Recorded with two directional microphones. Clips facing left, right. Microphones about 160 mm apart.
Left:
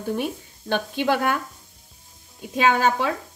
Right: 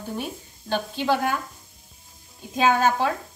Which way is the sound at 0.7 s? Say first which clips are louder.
Left 1 dB; 60° left (ahead or behind).